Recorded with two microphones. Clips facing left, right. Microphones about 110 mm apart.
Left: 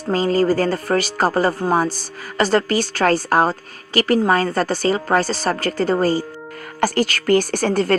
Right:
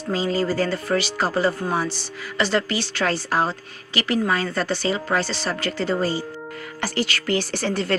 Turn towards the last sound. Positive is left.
turn(degrees=45)  # may be behind; listen again after turning